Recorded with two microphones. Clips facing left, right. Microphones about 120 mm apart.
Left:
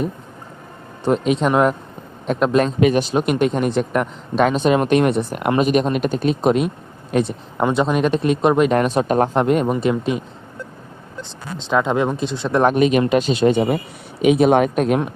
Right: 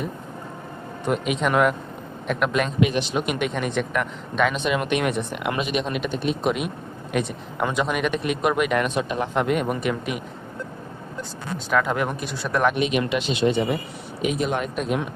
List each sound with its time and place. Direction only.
1.0 s speech: 35° left (ahead or behind)
11.7 s speech: 25° left (ahead or behind)
12.7 s speech: 45° left (ahead or behind)
14.3 s speech: 70° left (ahead or behind)